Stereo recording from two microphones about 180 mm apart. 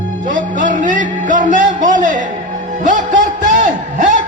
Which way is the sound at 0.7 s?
45° right (ahead or behind).